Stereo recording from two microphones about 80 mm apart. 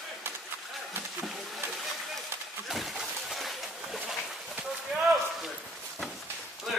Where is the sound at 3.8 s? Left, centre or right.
Centre.